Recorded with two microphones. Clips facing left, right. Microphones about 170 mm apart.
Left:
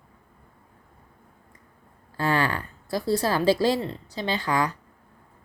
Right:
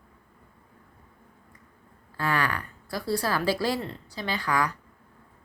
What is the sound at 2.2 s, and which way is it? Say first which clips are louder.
Speech: left 3 dB; 30° left (ahead or behind).